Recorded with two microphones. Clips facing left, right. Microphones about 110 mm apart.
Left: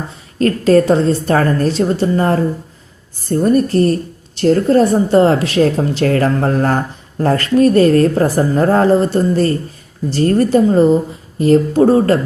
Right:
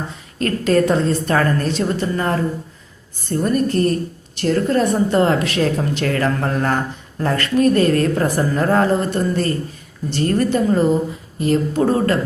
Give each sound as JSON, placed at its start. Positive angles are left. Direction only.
{"t": 0.1, "sound": "a woman's voice", "side_deg": 35}